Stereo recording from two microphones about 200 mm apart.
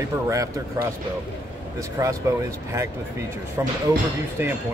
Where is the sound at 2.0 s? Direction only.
15° right (ahead or behind).